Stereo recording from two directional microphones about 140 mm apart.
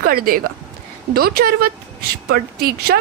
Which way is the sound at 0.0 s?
90° right.